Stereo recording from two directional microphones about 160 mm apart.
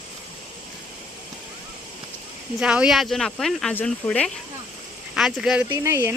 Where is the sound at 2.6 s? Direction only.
5° right (ahead or behind).